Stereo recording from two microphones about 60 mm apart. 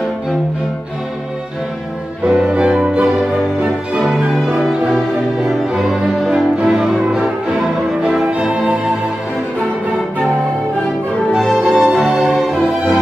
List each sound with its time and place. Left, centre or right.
2.2 s music: centre
5.7 s music: centre
11.3 s music: centre